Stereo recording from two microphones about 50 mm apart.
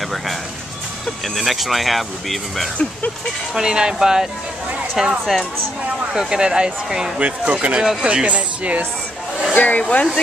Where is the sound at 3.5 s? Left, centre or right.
Centre.